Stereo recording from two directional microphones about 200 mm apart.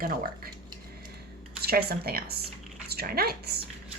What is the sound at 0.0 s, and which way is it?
Speech, 45° right (ahead or behind).